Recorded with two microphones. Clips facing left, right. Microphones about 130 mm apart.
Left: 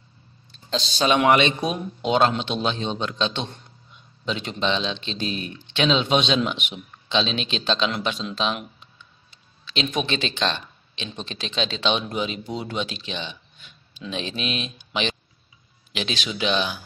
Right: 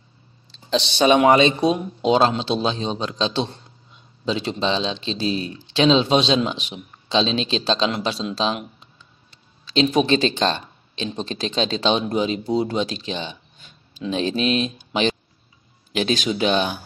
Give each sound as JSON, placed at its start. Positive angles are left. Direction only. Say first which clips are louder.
{"t": 0.7, "sound": "speech", "louder": "right 6 dB", "side_deg": -75}
{"t": 1.0, "sound": "speech", "louder": "right 4 dB", "side_deg": -25}